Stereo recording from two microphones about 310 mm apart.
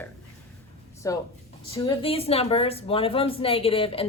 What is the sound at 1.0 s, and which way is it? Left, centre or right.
A woman's voice, centre.